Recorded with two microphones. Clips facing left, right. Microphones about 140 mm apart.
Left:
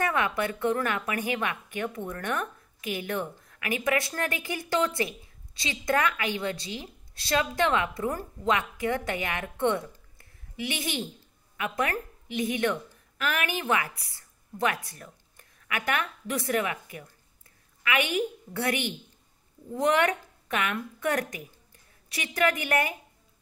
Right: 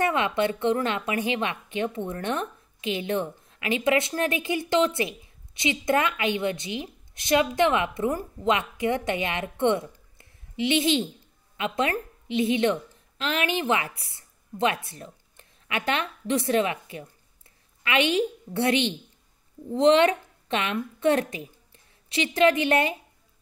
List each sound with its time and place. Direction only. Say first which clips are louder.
0.0 s a woman's voice: right 4 dB; 20° right (ahead or behind)